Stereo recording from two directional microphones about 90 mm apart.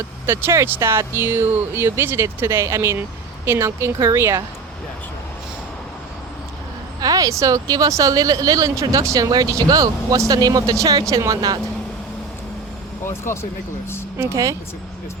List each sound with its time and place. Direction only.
0.3 s speech: 30° right (ahead or behind)
7.0 s speech: 40° right (ahead or behind)
13.1 s speech: 30° left (ahead or behind)
14.2 s speech: 35° right (ahead or behind)